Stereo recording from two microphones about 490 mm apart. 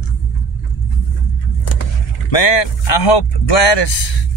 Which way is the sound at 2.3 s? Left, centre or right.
Left.